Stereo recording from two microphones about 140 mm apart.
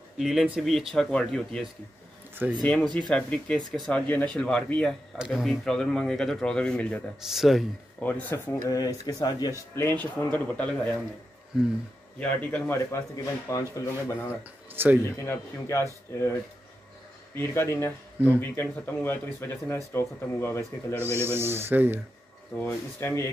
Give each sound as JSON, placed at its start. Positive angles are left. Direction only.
{"t": 0.2, "sound": "speech", "side_deg": 0}
{"t": 8.0, "sound": "speech", "side_deg": 10}
{"t": 8.6, "sound": "speech", "side_deg": 25}
{"t": 9.8, "sound": "speech", "side_deg": 15}
{"t": 12.2, "sound": "speech", "side_deg": 10}
{"t": 13.2, "sound": "speech", "side_deg": 20}
{"t": 14.8, "sound": "speech", "side_deg": -15}
{"t": 15.1, "sound": "speech", "side_deg": 20}
{"t": 17.4, "sound": "speech", "side_deg": 15}
{"t": 21.0, "sound": "speech", "side_deg": -15}
{"t": 22.6, "sound": "speech", "side_deg": 15}